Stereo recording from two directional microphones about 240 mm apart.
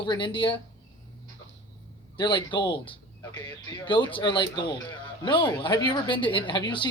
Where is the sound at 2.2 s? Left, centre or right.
Centre.